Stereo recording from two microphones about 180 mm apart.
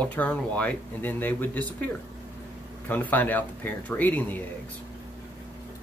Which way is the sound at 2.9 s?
10° left (ahead or behind).